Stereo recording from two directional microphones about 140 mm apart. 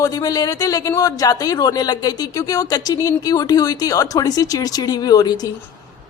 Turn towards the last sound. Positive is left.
turn(degrees=30)  # may be behind; listen again after turning